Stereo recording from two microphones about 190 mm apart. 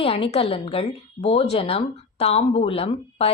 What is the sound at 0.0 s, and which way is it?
A woman's voice, 30° left (ahead or behind).